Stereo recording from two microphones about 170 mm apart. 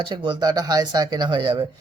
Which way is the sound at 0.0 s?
30° right (ahead or behind).